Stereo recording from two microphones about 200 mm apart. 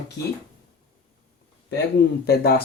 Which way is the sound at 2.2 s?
50° left (ahead or behind).